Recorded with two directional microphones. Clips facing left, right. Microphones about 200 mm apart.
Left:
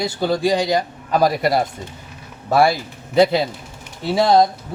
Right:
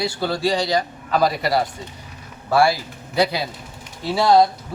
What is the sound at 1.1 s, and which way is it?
Speech, 50° left (ahead or behind).